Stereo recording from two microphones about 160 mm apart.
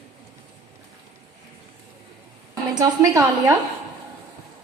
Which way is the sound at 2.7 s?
20° right (ahead or behind).